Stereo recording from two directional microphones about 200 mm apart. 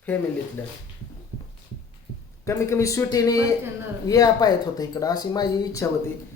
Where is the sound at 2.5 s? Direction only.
15° left (ahead or behind).